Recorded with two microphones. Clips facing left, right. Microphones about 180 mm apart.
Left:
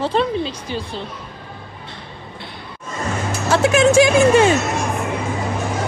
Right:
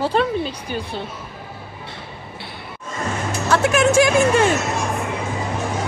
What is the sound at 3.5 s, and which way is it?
Speech, 25° left (ahead or behind).